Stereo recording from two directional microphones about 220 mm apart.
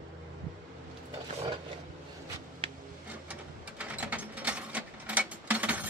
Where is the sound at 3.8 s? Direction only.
5° right (ahead or behind).